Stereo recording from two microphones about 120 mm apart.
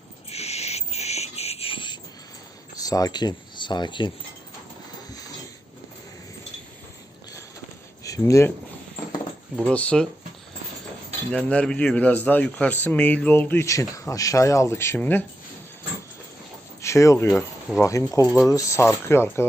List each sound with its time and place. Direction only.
0.3 s owl: 60° left (ahead or behind); by 2.0 s 45° left (ahead or behind)
2.7 s speech: 30° left (ahead or behind)
8.0 s speech: 25° left (ahead or behind)
9.6 s speech: 10° left (ahead or behind)
11.3 s speech: 10° left (ahead or behind)
16.8 s speech: 25° left (ahead or behind)